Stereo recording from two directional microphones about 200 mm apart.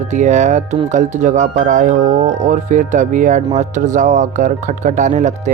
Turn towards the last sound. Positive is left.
turn(degrees=-35)  # may be behind; listen again after turning